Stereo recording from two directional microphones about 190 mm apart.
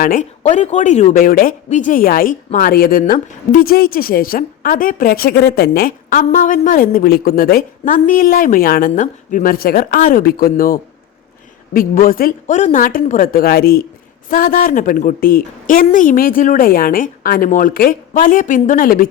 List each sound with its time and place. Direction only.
0.0 s speech: 45° left (ahead or behind)